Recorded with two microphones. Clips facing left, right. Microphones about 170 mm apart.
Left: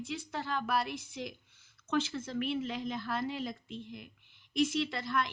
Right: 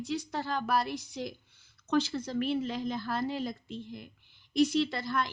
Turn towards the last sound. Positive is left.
turn(degrees=-35)  # may be behind; listen again after turning